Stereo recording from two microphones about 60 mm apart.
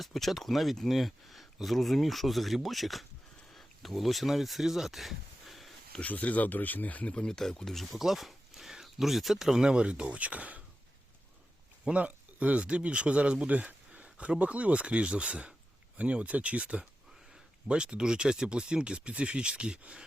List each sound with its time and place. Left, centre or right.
0.0 s speech: centre
3.5 s a sound: centre
6.0 s speech: left
7.1 s speech: centre; by 10.6 s right
11.9 s speech: right